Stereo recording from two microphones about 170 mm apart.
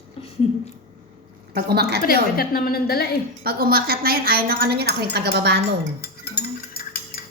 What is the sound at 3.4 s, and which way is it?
A woman's voice, 60° right (ahead or behind).